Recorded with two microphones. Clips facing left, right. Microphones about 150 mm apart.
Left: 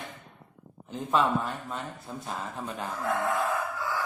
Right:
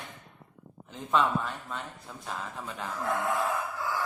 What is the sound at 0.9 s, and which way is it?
Speech, 5° left (ahead or behind).